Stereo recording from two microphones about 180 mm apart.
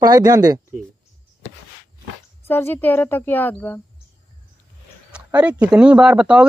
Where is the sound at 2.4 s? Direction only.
10° left (ahead or behind).